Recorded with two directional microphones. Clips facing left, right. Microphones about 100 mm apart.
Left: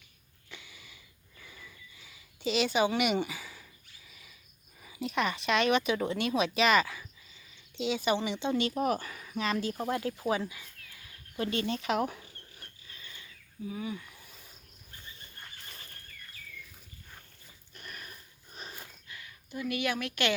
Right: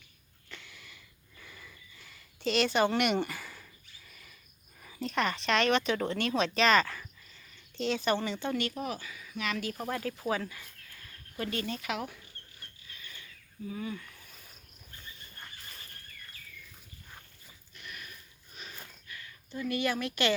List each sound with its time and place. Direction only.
0.5 s a sound: 5° left (ahead or behind)
4.8 s speech: 10° left (ahead or behind)
8.6 s speech: 45° left (ahead or behind)
9.4 s speech: 30° left (ahead or behind)
10.2 s a sound: 15° left (ahead or behind)
11.5 s speech: 25° left (ahead or behind)
12.9 s pulleys: 30° left (ahead or behind)
13.7 s speech: 10° left (ahead or behind)
17.7 s sniff: 40° left (ahead or behind)
19.0 s speech: 20° left (ahead or behind); by 20.3 s centre (ahead or behind)